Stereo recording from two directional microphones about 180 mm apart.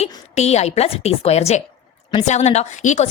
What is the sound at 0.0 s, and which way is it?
A woman's voice, 35° left (ahead or behind).